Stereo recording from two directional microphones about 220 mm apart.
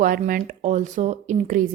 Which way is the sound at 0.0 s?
40° right (ahead or behind).